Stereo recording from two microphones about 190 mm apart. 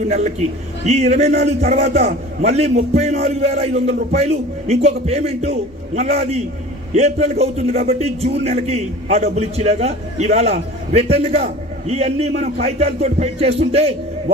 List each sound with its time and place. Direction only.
0.8 s a man's voice: 35° right (ahead or behind)